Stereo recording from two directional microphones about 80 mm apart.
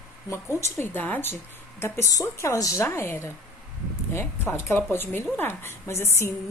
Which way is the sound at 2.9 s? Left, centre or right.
Left.